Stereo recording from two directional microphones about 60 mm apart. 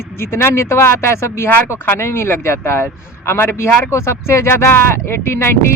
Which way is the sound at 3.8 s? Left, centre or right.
Left.